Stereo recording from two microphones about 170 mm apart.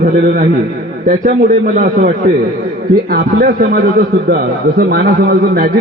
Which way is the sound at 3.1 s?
60° right (ahead or behind).